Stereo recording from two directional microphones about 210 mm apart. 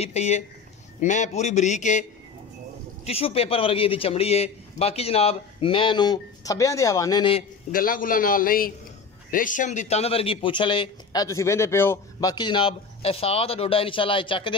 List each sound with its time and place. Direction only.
0.0 s a man's voice: 30° left (ahead or behind)
3.1 s a man's voice: 30° left (ahead or behind)
7.7 s a man's voice: 40° left (ahead or behind); by 14.5 s 25° left (ahead or behind)